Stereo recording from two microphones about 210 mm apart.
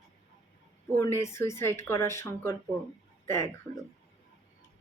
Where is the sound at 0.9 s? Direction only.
15° left (ahead or behind).